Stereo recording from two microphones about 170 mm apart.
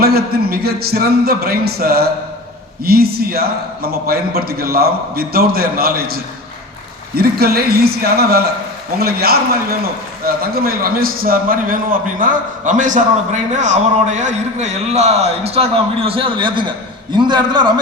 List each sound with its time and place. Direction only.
0.0 s a man's voice: 65° right (ahead or behind); by 17.7 s 25° right (ahead or behind)